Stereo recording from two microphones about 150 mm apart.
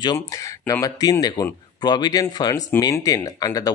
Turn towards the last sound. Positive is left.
turn(degrees=25)  # may be behind; listen again after turning